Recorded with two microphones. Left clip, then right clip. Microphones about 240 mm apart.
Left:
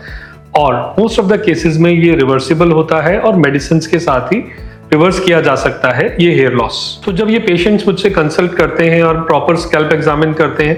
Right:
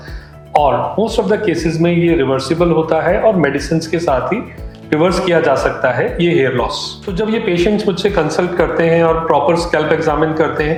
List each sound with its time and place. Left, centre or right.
0.5 s speech: left